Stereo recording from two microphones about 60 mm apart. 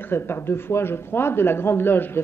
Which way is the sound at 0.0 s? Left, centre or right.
Left.